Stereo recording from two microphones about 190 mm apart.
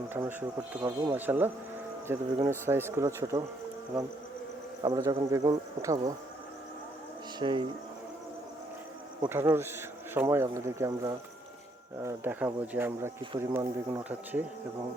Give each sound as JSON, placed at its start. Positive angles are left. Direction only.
{"t": 0.1, "sound": "speech", "side_deg": -10}
{"t": 4.8, "sound": "insect", "side_deg": -20}
{"t": 7.3, "sound": "insect", "side_deg": -25}
{"t": 9.3, "sound": "speech", "side_deg": -10}